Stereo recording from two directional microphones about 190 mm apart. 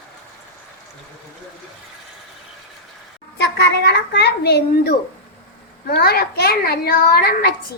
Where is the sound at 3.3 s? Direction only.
65° left (ahead or behind).